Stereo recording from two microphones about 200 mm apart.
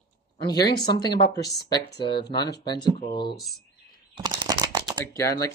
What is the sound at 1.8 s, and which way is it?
Speech, 55° left (ahead or behind).